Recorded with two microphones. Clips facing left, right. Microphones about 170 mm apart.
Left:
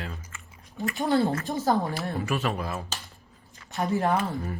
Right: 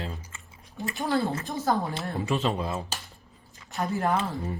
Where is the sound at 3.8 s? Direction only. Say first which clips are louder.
Left 2 dB; 20° left (ahead or behind).